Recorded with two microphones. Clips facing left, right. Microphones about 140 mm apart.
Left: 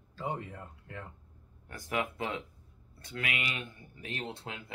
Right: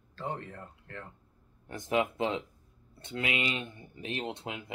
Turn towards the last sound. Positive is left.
turn(degrees=-20)  # may be behind; listen again after turning